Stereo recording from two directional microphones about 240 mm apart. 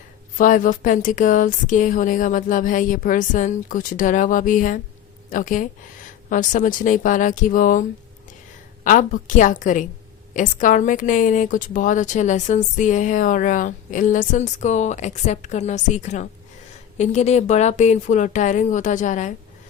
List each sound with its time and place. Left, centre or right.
0.3 s a woman's voice: left